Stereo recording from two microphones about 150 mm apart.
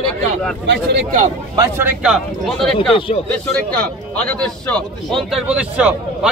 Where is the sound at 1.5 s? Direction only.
15° right (ahead or behind).